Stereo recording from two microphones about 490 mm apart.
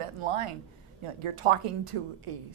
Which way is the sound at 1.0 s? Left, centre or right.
Right.